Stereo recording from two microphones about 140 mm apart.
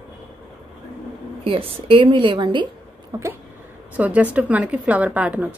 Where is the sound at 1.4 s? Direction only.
40° right (ahead or behind).